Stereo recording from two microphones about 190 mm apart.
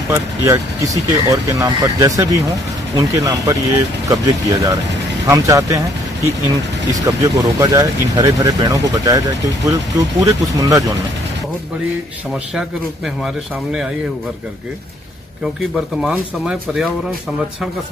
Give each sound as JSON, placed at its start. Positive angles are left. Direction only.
{"t": 0.1, "sound": "speech", "side_deg": -15}
{"t": 6.9, "sound": "speech", "side_deg": -20}
{"t": 12.5, "sound": "speech", "side_deg": -5}
{"t": 15.7, "sound": "speech", "side_deg": -5}